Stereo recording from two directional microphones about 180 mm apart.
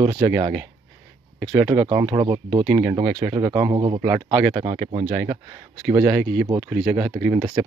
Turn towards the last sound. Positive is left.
turn(degrees=-20)  # may be behind; listen again after turning